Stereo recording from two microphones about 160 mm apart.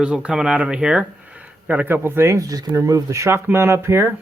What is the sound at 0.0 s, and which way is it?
Speech, 5° right (ahead or behind).